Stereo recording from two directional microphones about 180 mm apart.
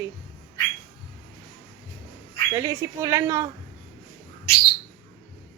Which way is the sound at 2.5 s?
15° right (ahead or behind).